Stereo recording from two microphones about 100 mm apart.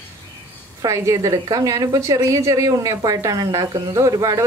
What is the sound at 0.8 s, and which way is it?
A woman's voice, 30° right (ahead or behind).